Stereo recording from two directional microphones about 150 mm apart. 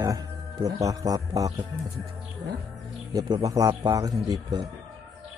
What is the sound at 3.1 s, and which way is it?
Speech, 25° right (ahead or behind).